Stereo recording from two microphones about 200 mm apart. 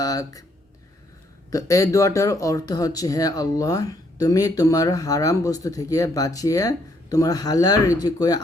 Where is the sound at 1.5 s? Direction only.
15° left (ahead or behind).